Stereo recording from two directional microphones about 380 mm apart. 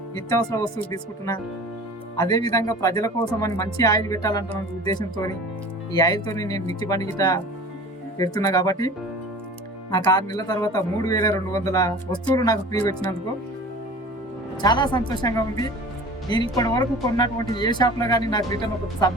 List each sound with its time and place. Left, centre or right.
0.3 s speech: centre
9.9 s speech: centre
14.6 s speech: centre